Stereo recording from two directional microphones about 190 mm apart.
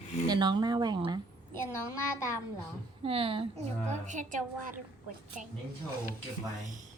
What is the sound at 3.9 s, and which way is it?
Speech, 40° right (ahead or behind).